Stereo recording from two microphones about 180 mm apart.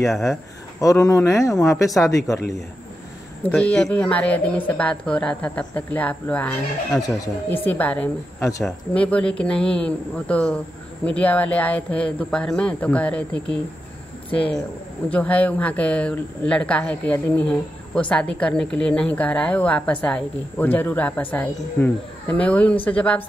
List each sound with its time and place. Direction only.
0.1 s speech: centre (ahead or behind)
0.7 s speech: 20° left (ahead or behind)
3.5 s speech: 5° left (ahead or behind)
8.6 s speech: 5° left (ahead or behind)
15.0 s speech: 10° left (ahead or behind)